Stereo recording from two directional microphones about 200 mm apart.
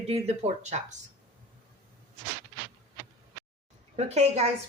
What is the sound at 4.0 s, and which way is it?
Speech, 30° right (ahead or behind).